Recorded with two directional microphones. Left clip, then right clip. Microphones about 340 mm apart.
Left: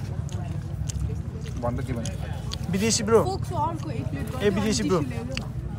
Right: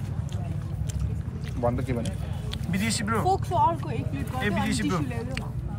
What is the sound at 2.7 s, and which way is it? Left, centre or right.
Speech, centre.